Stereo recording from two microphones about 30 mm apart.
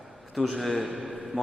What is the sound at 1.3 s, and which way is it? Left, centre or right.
Speech, right.